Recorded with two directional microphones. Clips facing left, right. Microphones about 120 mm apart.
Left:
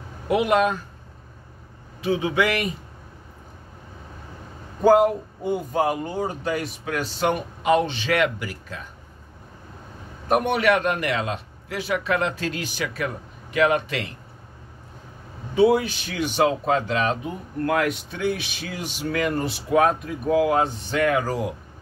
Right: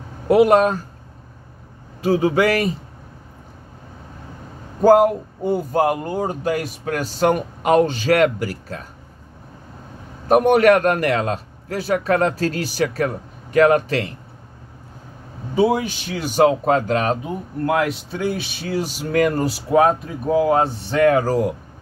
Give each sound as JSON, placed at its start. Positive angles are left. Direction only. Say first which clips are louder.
{"t": 0.3, "sound": "speech", "louder": "right 6 dB", "side_deg": -40}
{"t": 2.0, "sound": "speech", "louder": "right 5 dB", "side_deg": -40}
{"t": 4.8, "sound": "speech", "louder": "right 4 dB", "side_deg": -40}
{"t": 10.2, "sound": "speech", "louder": "right 7 dB", "side_deg": -40}
{"t": 15.5, "sound": "speech", "louder": "even", "side_deg": -15}
{"t": 16.2, "sound": "speech", "louder": "right 5 dB", "side_deg": -40}
{"t": 17.6, "sound": "speech", "louder": "right 3 dB", "side_deg": -30}